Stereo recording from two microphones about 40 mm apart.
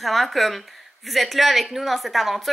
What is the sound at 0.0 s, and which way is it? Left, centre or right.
Speech, centre.